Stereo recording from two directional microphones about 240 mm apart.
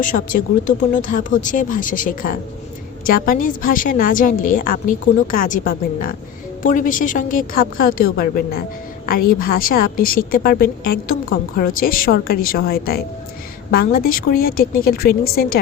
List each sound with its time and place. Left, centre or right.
0.0 s a woman's voice: left